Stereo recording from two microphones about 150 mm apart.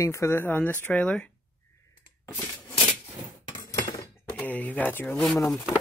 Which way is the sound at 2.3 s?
15° left (ahead or behind).